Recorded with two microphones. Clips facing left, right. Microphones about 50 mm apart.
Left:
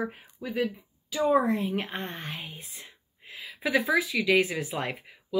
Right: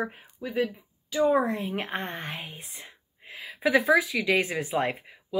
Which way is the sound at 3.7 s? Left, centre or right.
Centre.